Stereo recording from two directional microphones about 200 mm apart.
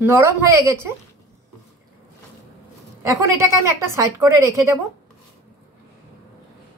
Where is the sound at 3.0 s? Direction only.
15° right (ahead or behind).